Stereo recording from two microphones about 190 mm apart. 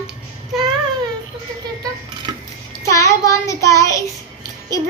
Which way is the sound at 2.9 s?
15° left (ahead or behind).